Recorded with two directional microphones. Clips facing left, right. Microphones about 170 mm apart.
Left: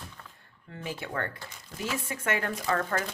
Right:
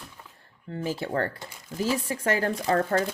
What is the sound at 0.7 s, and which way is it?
Speech, 35° right (ahead or behind).